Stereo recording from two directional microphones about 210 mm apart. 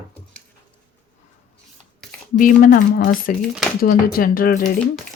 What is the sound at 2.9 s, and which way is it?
Speech, 55° left (ahead or behind).